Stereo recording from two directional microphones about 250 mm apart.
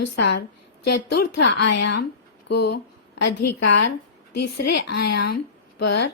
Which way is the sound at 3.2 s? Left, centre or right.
Left.